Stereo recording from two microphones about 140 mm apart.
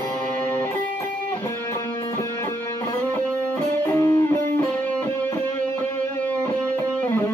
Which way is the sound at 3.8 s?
20° left (ahead or behind).